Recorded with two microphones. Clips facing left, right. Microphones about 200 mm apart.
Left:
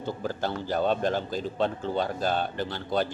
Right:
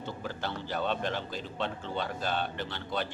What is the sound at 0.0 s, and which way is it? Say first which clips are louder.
A man's voice: left 6 dB; 40° left (ahead or behind).